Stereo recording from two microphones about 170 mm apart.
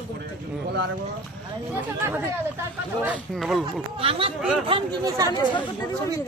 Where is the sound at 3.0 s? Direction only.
Centre (ahead or behind).